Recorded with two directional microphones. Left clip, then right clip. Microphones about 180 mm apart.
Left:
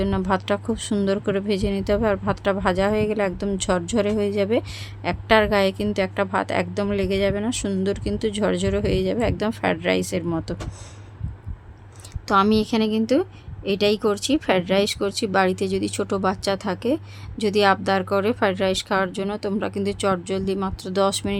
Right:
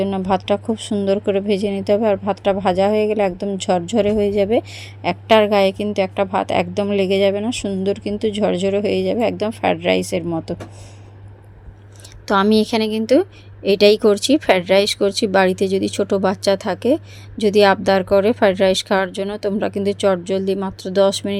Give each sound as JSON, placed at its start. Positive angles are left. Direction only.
{"t": 0.0, "sound": "a woman's voice", "side_deg": -5}
{"t": 12.3, "sound": "a woman's voice", "side_deg": -20}